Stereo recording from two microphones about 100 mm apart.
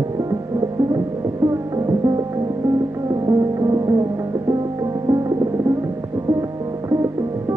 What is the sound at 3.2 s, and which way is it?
Music, 35° right (ahead or behind).